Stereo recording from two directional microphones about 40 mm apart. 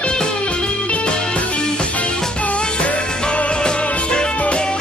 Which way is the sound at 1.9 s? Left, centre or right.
Left.